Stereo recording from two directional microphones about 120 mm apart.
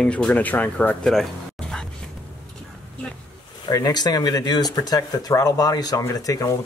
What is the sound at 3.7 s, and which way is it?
Speech, 30° left (ahead or behind).